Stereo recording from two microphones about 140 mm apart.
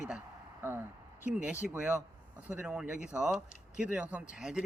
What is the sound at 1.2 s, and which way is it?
Speech, 10° right (ahead or behind).